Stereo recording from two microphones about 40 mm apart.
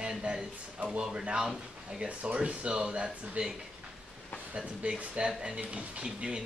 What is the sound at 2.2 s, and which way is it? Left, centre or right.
Speech, right.